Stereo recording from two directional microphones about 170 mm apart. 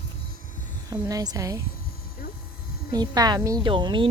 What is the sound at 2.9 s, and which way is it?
A woman's voice, 25° right (ahead or behind).